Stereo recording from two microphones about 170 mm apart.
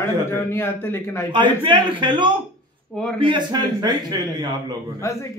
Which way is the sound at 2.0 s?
30° right (ahead or behind).